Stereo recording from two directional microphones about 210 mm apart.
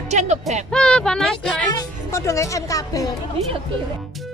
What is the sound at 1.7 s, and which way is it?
A child's voice, 15° left (ahead or behind).